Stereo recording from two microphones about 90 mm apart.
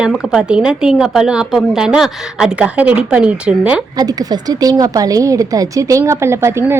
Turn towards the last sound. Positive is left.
turn(degrees=-30)  # may be behind; listen again after turning